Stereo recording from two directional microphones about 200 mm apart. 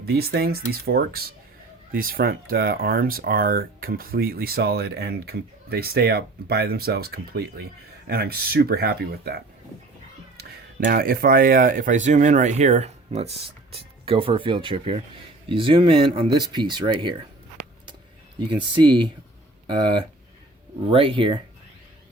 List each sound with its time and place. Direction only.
0.0 s speech: 55° right (ahead or behind)
10.8 s speech: 45° right (ahead or behind); by 17.2 s 25° right (ahead or behind)
18.4 s speech: 25° right (ahead or behind)
20.9 s speech: 25° right (ahead or behind)